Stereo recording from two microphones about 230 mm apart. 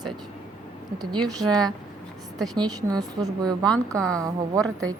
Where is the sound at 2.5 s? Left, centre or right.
Centre.